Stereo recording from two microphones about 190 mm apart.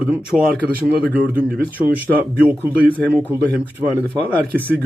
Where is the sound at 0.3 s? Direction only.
Centre (ahead or behind).